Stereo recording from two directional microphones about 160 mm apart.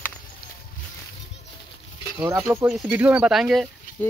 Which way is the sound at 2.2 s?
15° right (ahead or behind).